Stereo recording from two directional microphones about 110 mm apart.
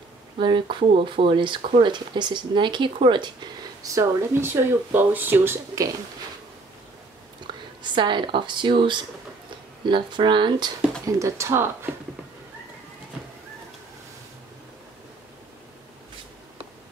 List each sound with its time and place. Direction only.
0.4 s speech: 45° right (ahead or behind)
3.8 s speech: 30° right (ahead or behind)
7.8 s speech: 45° right (ahead or behind)
11.1 s speech: 25° right (ahead or behind)